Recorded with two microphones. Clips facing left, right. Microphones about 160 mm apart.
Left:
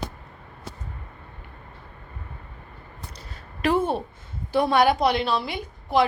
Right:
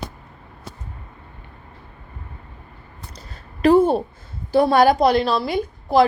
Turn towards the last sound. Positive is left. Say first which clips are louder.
# right 6 dB
turn(degrees=-40)  # may be behind; listen again after turning